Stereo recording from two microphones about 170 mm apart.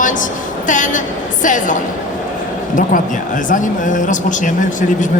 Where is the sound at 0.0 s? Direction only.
50° left (ahead or behind).